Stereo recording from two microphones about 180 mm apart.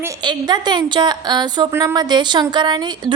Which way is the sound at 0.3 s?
25° right (ahead or behind).